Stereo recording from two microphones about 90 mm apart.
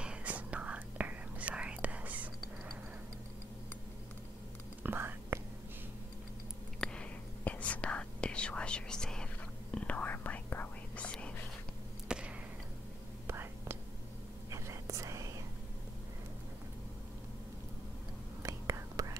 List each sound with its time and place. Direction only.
0.0 s whispering: 15° right (ahead or behind)
4.8 s whispering: 25° right (ahead or behind)
6.8 s whispering: 10° left (ahead or behind)
12.1 s basketball bounce: 10° right (ahead or behind)
13.3 s whispering: 30° right (ahead or behind)
18.4 s whispering: 40° right (ahead or behind)